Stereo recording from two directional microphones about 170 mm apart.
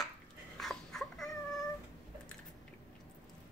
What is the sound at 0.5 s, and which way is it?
Dog, 5° left (ahead or behind).